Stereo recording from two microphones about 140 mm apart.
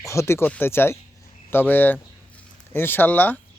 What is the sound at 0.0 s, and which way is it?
Speech, 20° left (ahead or behind).